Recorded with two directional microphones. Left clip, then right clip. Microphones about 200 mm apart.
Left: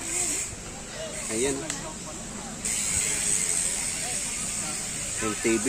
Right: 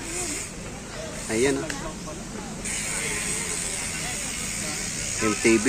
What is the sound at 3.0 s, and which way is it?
Vehicle, 60° left (ahead or behind).